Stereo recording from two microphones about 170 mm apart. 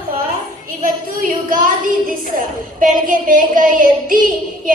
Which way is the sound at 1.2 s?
50° right (ahead or behind).